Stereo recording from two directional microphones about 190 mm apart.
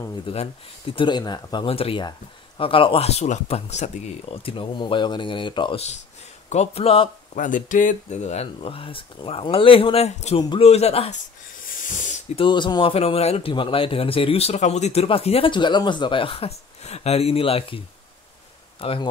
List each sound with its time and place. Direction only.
0.3 s speech: 30° left (ahead or behind)
12.4 s speech: 25° left (ahead or behind)